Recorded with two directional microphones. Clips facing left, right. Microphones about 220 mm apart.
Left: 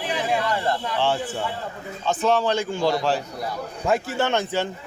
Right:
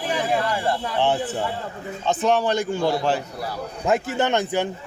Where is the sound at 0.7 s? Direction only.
20° right (ahead or behind).